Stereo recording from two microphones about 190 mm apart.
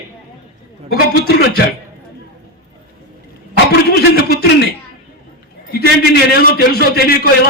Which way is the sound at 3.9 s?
60° left (ahead or behind).